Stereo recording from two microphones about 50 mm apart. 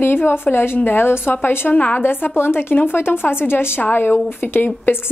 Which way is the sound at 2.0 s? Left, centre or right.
Left.